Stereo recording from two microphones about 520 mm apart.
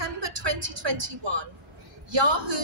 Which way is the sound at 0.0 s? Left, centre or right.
Right.